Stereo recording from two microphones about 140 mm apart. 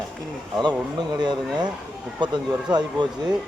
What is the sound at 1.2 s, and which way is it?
A man's voice, 30° right (ahead or behind).